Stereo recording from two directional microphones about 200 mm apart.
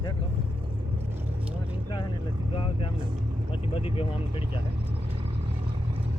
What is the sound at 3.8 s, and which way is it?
Speech, 30° left (ahead or behind).